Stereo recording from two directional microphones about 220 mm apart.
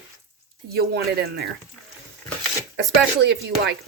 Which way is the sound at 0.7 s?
45° right (ahead or behind).